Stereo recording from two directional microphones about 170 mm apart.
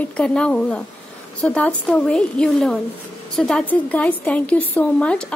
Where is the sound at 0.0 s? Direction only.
5° left (ahead or behind).